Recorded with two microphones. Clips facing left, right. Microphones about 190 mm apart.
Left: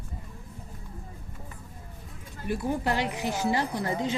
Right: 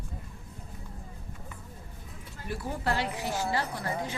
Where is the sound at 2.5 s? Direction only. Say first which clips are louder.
Left 4 dB; 15° left (ahead or behind).